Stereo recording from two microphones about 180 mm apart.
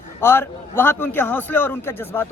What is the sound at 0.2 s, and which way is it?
A man's voice, 10° left (ahead or behind).